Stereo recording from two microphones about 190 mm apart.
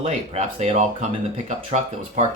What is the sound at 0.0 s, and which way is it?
Speech, 35° right (ahead or behind).